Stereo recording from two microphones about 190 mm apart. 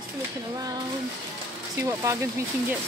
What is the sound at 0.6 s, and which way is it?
Speech, 20° right (ahead or behind).